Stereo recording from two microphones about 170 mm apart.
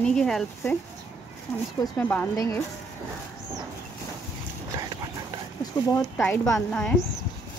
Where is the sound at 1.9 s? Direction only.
10° left (ahead or behind).